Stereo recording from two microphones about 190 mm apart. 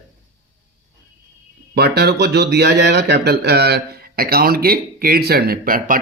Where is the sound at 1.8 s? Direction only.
60° right (ahead or behind).